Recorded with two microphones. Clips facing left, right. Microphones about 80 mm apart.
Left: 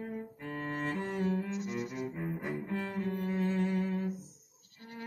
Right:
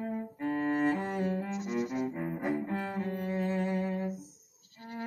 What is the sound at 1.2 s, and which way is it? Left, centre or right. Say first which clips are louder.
Music: even; right.